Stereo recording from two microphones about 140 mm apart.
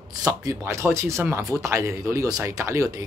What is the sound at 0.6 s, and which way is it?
Speech, 20° right (ahead or behind).